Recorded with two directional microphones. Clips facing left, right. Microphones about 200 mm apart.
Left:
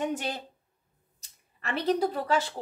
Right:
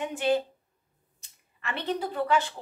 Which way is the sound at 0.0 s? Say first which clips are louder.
Left 1 dB; 40° left (ahead or behind).